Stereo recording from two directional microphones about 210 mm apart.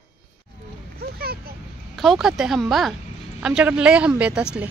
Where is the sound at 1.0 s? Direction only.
45° right (ahead or behind).